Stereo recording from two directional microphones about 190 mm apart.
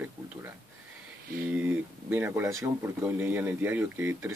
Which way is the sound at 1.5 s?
10° right (ahead or behind).